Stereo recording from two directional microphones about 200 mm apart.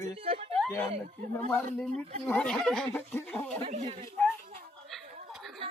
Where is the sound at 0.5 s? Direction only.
5° left (ahead or behind).